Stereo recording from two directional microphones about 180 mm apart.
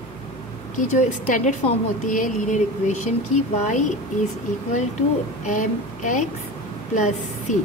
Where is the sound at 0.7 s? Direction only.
45° left (ahead or behind).